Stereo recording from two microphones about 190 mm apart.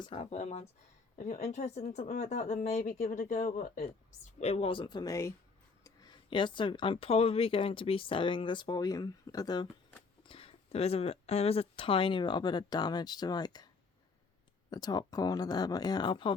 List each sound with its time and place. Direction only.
0.0 s speech: 30° left (ahead or behind)
14.7 s speech: 20° left (ahead or behind)